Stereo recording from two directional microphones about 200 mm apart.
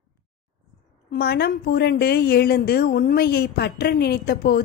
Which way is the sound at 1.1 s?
50° left (ahead or behind).